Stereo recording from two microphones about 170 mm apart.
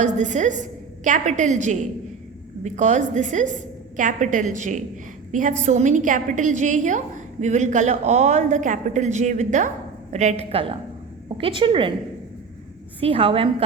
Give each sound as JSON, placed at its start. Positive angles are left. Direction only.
{"t": 0.0, "sound": "a woman's voice", "side_deg": -45}
{"t": 13.0, "sound": "a woman's voice", "side_deg": -35}